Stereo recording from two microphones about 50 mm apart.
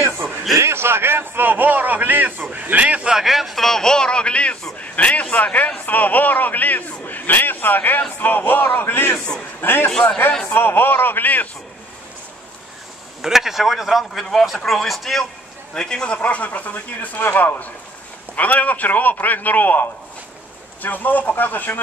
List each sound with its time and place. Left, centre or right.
0.6 s a man's voice: right
3.1 s a man's voice: centre; by 11.4 s left
13.2 s speech: centre
15.7 s a man's voice: centre
16.2 s a man's voice: left
17.2 s a man's voice: left
18.3 s a man's voice: left